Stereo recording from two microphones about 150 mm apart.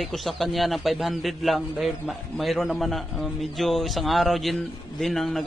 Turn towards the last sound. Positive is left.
turn(degrees=0)  # may be behind; listen again after turning